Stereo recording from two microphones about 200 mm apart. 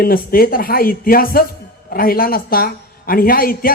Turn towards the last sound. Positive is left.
turn(degrees=45)  # may be behind; listen again after turning